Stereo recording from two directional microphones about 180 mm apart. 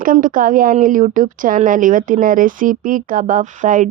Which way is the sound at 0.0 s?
50° right (ahead or behind).